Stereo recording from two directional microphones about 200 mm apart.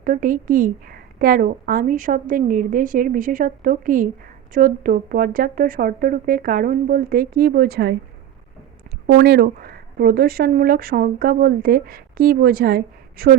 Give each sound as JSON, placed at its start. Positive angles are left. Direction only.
{"t": 0.0, "sound": "speech", "side_deg": -45}
{"t": 9.0, "sound": "speech", "side_deg": -50}